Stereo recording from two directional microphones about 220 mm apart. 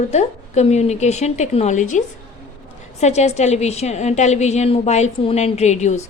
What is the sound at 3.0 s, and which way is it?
A woman's voice, 30° left (ahead or behind).